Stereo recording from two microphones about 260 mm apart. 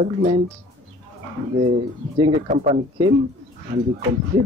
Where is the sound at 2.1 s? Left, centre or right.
Right.